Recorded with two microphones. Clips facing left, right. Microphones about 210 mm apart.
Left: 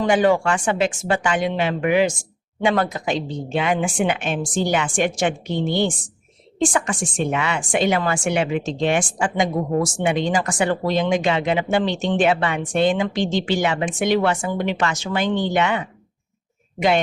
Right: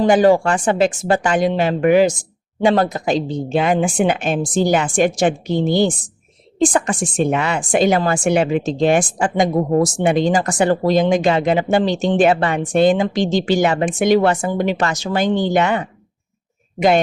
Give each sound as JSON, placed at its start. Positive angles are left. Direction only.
{"t": 0.0, "sound": "a woman's voice", "side_deg": -35}